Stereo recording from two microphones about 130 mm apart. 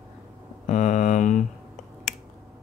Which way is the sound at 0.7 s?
75° left (ahead or behind).